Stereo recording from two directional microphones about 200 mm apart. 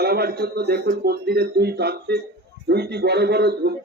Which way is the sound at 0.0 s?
50° right (ahead or behind).